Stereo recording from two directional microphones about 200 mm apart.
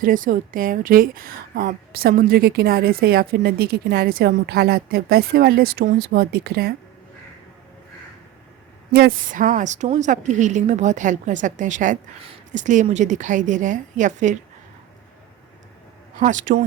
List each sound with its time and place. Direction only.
0.0 s a woman's voice: 45° right (ahead or behind)
8.9 s a woman's voice: 50° right (ahead or behind)
16.2 s a woman's voice: 40° right (ahead or behind)